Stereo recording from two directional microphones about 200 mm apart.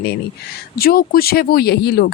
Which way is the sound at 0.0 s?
50° left (ahead or behind).